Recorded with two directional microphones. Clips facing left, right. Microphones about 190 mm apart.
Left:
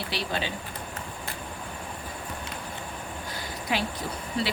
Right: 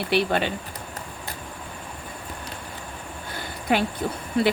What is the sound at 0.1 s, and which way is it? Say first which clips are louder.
Speech: right 10 dB; 60° right (ahead or behind).